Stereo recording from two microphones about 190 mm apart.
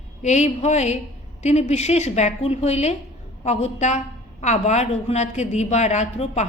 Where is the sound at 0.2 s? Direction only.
35° left (ahead or behind).